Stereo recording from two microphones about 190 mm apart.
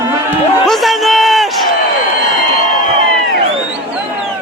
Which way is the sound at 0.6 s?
Centre (ahead or behind).